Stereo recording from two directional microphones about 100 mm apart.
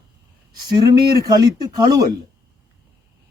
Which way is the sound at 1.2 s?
40° right (ahead or behind).